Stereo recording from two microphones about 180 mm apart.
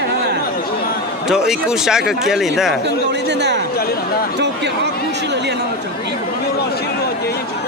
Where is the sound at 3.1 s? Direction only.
70° right (ahead or behind).